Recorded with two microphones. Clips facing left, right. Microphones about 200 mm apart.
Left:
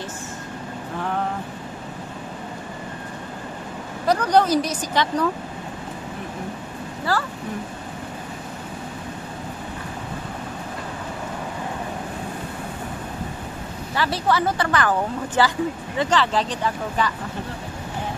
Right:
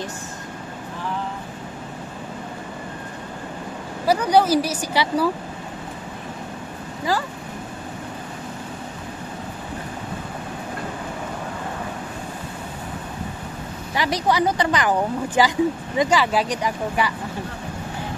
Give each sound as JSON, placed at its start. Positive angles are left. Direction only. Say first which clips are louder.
{"t": 4.0, "sound": "speech", "louder": "right 1 dB", "side_deg": -10}
{"t": 7.1, "sound": "speech", "louder": "right 1 dB", "side_deg": -15}
{"t": 13.9, "sound": "speech", "louder": "right 1 dB", "side_deg": -15}